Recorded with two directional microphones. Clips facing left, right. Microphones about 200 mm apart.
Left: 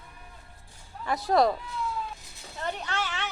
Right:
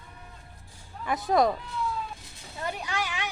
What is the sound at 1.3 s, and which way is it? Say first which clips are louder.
Speech: even; centre (ahead or behind).